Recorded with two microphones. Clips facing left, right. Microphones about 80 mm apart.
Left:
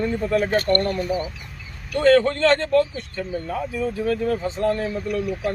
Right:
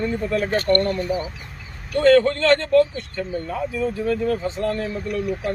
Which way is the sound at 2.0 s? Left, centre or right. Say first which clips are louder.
Right 1 dB; centre.